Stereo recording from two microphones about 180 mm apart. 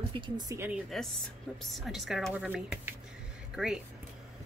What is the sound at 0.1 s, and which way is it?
Speech, 25° right (ahead or behind).